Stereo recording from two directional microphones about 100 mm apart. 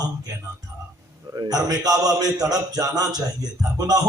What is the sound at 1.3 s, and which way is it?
A man's voice, 40° right (ahead or behind).